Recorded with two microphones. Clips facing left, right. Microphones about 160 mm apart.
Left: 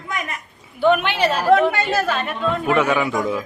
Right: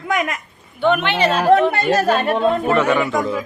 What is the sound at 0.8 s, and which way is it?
Speech, 5° left (ahead or behind).